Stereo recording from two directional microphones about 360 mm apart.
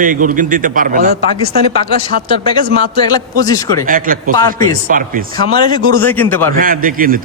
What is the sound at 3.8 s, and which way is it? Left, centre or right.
A man's voice, right.